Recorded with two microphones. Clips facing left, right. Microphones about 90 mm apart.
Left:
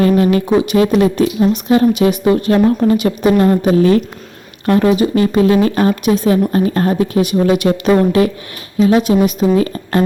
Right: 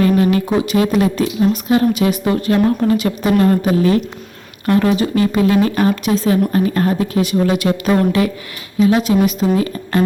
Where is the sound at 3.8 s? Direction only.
40° left (ahead or behind).